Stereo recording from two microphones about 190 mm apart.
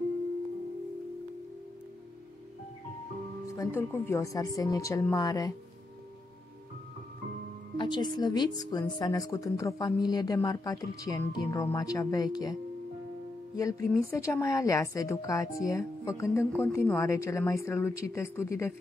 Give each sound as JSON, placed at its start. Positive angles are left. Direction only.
{"t": 3.4, "sound": "a woman's voice", "side_deg": 15}
{"t": 7.7, "sound": "speech", "side_deg": 25}
{"t": 13.6, "sound": "a woman's voice", "side_deg": 15}